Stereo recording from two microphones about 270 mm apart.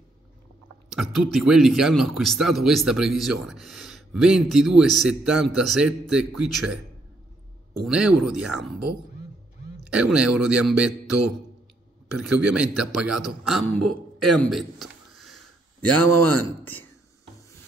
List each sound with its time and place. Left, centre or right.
0.9 s speech: centre
7.8 s speech: centre
16.0 s speech: right